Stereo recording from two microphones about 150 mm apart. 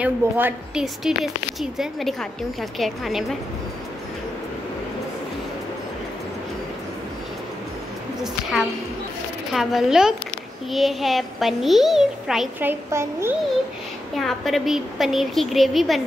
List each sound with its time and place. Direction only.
0.0 s a woman's voice: 10° right (ahead or behind)
8.2 s a woman's voice: 5° right (ahead or behind)
12.6 s a woman's voice: 15° right (ahead or behind)
14.1 s a child's voice: centre (ahead or behind)